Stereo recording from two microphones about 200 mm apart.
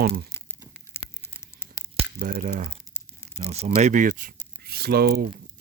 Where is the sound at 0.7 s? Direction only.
10° left (ahead or behind).